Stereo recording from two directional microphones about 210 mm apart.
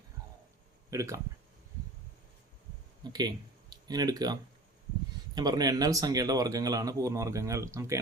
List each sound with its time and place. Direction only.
0.9 s speech: 15° right (ahead or behind)
3.0 s speech: 20° right (ahead or behind)